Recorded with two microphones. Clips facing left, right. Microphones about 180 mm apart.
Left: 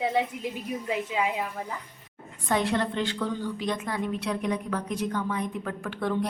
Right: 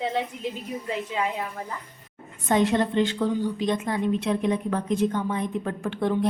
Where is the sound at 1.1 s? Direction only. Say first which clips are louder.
Right 1 dB; 5° left (ahead or behind).